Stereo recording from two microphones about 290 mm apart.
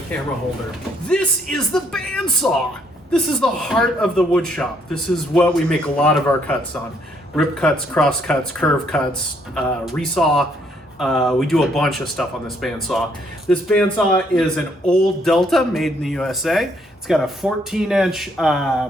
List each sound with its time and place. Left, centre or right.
1.0 s speech: centre